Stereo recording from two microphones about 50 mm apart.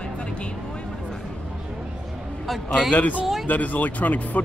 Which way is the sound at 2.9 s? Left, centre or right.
Left.